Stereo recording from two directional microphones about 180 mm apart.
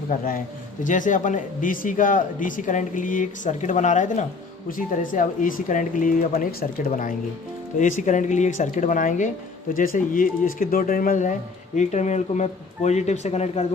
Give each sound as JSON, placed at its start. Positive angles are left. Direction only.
{"t": 0.1, "sound": "speech", "side_deg": 50}